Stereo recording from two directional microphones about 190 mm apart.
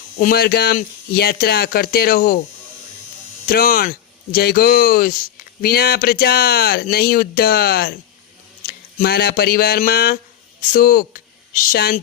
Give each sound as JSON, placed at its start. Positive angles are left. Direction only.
{"t": 0.2, "sound": "speech", "side_deg": 50}
{"t": 3.4, "sound": "speech", "side_deg": 50}